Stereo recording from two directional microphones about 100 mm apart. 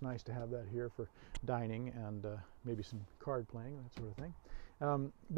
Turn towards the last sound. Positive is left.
turn(degrees=20)  # may be behind; listen again after turning